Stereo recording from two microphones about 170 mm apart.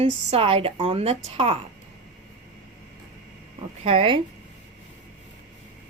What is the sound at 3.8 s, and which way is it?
Speech, 30° right (ahead or behind).